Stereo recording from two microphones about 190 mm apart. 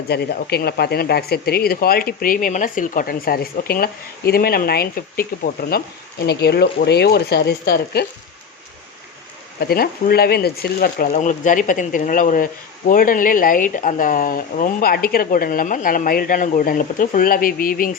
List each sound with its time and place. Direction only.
0.1 s speech: 55° left (ahead or behind)
9.6 s speech: 55° left (ahead or behind)